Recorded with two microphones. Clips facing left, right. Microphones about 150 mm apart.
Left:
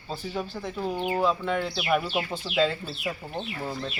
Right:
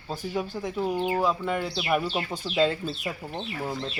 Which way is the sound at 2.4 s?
5° left (ahead or behind).